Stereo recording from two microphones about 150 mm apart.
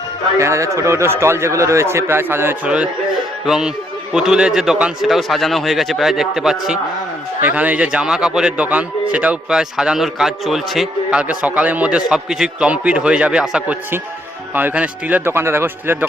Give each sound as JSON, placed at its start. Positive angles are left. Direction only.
{"t": 0.3, "sound": "a man's voice", "side_deg": -20}